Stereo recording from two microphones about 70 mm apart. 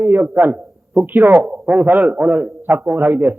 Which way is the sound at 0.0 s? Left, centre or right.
Right.